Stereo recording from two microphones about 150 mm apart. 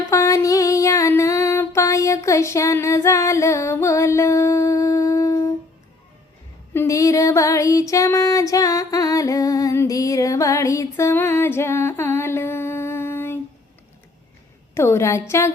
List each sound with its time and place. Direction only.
0.1 s music: 20° left (ahead or behind)
6.7 s female singing: 20° left (ahead or behind)
14.8 s a woman's voice: 20° left (ahead or behind)